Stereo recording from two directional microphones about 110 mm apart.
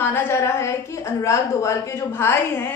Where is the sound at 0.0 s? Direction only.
20° left (ahead or behind).